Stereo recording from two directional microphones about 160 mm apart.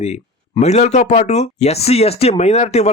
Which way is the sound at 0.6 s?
45° left (ahead or behind).